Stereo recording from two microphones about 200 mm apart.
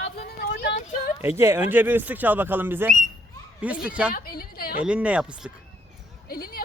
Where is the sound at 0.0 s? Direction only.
55° left (ahead or behind).